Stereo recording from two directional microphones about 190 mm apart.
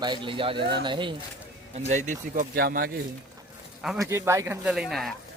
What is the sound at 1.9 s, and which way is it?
Speech, 40° right (ahead or behind).